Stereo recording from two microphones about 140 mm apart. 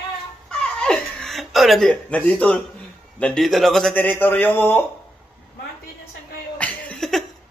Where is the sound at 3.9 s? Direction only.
15° left (ahead or behind).